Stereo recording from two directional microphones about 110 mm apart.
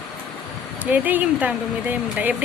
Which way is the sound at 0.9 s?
15° right (ahead or behind).